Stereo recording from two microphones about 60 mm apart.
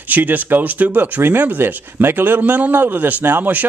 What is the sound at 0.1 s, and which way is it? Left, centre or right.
A man's voice, right.